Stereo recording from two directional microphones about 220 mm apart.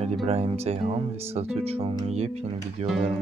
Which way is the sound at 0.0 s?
30° right (ahead or behind).